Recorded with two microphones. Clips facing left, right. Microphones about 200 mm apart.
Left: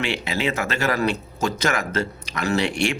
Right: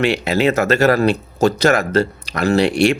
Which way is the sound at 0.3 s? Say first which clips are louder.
Right 10 dB; 40° right (ahead or behind).